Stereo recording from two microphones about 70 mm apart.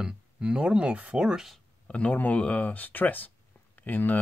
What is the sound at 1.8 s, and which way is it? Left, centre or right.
Speech, centre.